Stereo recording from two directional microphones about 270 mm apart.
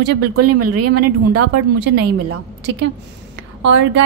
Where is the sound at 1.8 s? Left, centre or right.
Right.